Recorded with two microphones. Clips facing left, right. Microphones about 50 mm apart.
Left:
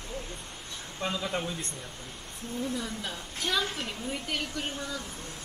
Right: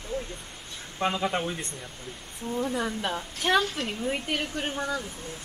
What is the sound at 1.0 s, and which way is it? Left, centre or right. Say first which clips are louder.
Speech: right 5 dB; right.